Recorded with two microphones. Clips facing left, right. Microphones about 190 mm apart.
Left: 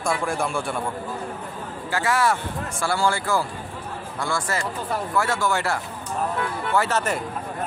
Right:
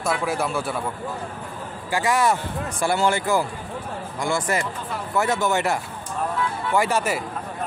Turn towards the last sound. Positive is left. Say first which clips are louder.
# right 1 dB
turn(degrees=-10)  # may be behind; listen again after turning